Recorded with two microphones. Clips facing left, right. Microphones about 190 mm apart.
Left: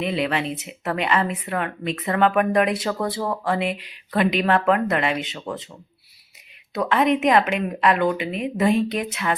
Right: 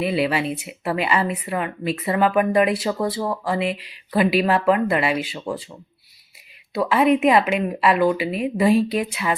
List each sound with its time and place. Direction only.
0.0 s speech: 5° right (ahead or behind)
6.7 s speech: 5° right (ahead or behind)